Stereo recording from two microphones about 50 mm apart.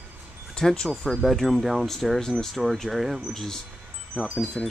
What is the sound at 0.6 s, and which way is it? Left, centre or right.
Speech, centre.